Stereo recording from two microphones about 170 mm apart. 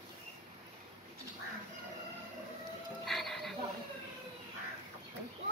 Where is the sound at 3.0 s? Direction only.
Centre (ahead or behind).